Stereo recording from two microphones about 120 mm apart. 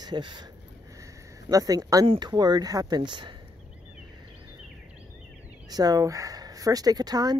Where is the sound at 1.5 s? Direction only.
30° right (ahead or behind).